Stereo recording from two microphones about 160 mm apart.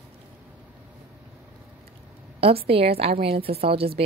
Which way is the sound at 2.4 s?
35° right (ahead or behind).